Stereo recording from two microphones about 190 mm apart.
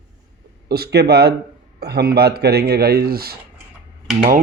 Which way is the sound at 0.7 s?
55° right (ahead or behind).